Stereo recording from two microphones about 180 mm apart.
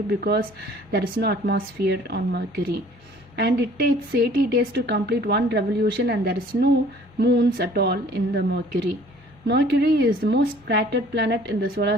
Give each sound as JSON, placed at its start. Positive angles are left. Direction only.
{"t": 0.1, "sound": "a woman's voice", "side_deg": -60}